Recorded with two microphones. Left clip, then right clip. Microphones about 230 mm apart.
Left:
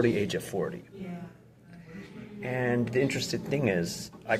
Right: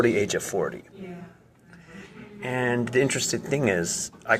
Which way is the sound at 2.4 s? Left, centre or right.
Right.